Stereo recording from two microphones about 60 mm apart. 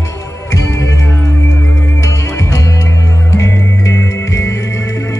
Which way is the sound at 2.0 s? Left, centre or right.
Left.